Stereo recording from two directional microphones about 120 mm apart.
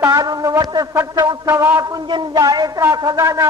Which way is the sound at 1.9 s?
40° right (ahead or behind).